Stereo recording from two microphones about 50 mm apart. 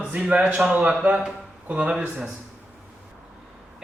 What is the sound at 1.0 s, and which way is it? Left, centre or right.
Speech, right.